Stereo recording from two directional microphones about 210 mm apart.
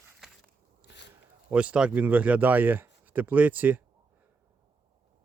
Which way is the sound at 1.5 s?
5° right (ahead or behind).